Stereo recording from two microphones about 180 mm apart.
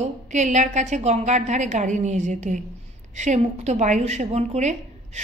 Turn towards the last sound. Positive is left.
turn(degrees=-40)  # may be behind; listen again after turning